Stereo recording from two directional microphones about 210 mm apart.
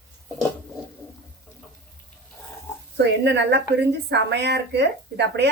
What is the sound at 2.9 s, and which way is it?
A woman's voice, 55° right (ahead or behind).